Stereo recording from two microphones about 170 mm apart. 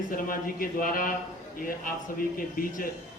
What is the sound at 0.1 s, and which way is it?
A man's voice, 55° left (ahead or behind).